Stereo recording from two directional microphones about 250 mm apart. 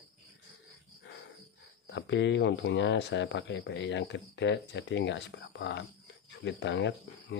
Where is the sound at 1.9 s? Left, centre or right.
Left.